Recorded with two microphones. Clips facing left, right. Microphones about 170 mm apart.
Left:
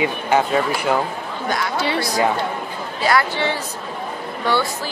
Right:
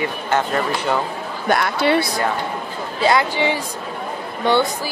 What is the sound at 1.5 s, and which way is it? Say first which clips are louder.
Speech: right 5 dB; 60° right (ahead or behind).